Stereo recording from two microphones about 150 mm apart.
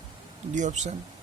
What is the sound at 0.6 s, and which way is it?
Speech, 55° right (ahead or behind).